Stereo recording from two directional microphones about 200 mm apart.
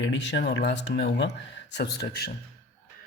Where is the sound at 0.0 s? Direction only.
65° left (ahead or behind).